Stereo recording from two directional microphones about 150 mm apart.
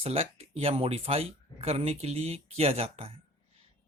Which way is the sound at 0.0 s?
40° right (ahead or behind).